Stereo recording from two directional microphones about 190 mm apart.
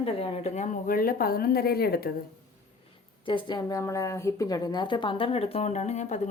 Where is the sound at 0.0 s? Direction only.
30° left (ahead or behind); by 2.1 s 55° left (ahead or behind).